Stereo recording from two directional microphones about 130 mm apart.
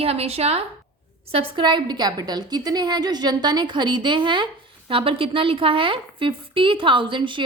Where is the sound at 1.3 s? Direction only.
35° right (ahead or behind).